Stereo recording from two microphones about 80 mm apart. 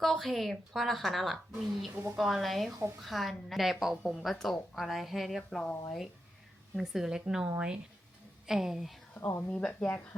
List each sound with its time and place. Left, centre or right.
0.0 s a woman's voice: centre
1.9 s a woman's voice: right
2.1 s a woman's voice: centre
6.7 s a woman's voice: centre
9.1 s speech: left
9.5 s speech: centre